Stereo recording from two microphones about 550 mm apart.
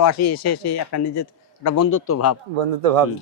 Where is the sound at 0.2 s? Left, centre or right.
Left.